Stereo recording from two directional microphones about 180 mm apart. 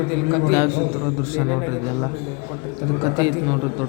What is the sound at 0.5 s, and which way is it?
Speech, 15° right (ahead or behind).